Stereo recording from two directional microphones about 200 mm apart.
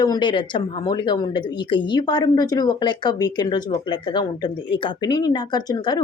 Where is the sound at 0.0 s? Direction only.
20° left (ahead or behind).